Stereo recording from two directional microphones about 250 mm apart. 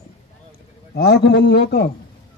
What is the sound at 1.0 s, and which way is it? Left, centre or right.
Speech, left.